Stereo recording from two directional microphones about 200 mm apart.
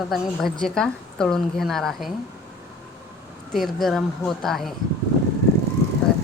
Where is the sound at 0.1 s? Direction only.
Centre (ahead or behind).